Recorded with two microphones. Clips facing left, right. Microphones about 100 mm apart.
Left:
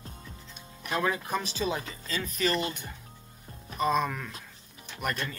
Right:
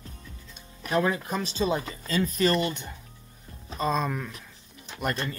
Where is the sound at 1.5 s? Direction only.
35° right (ahead or behind).